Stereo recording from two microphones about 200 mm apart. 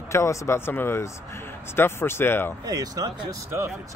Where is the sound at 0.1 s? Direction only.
15° left (ahead or behind).